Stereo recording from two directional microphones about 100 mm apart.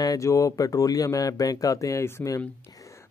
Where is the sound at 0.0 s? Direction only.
35° left (ahead or behind).